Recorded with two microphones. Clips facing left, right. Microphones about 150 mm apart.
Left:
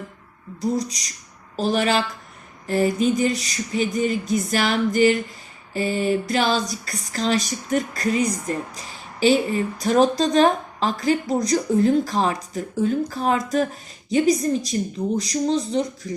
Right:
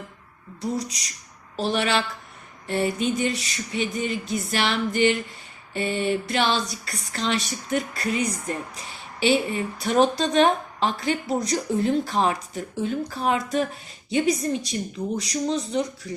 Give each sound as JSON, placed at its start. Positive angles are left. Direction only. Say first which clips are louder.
{"t": 0.6, "sound": "speech", "louder": "left 4 dB", "side_deg": 35}